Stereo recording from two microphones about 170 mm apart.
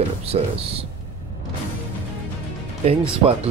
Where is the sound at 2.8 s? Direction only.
35° right (ahead or behind).